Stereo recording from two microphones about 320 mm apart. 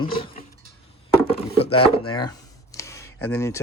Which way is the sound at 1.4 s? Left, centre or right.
Centre.